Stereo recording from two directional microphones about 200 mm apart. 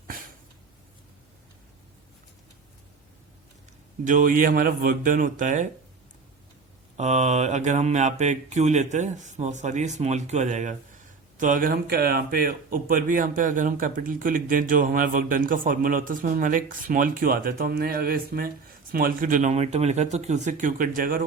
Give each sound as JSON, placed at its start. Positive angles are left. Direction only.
{"t": 4.0, "sound": "speech", "side_deg": -40}
{"t": 6.9, "sound": "mantra", "side_deg": -35}
{"t": 11.3, "sound": "speech", "side_deg": -40}